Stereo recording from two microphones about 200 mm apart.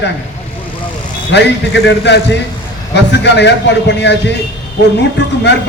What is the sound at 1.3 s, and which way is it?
A man's voice, 60° left (ahead or behind).